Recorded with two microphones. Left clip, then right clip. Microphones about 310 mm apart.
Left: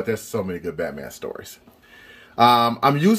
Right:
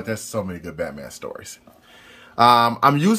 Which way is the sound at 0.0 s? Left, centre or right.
Centre.